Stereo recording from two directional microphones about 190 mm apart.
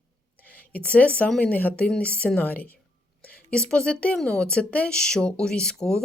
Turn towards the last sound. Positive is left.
turn(degrees=5)  # may be behind; listen again after turning